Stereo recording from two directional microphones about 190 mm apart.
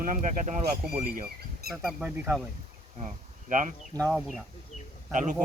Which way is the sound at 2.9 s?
40° right (ahead or behind).